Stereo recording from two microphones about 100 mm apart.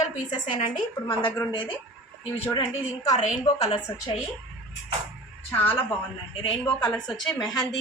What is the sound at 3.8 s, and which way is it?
Speech, 40° left (ahead or behind).